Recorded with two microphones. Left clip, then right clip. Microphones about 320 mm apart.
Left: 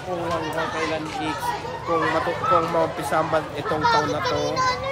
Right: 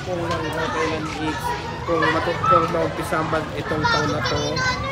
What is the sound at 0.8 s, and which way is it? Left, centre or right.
Speech, left.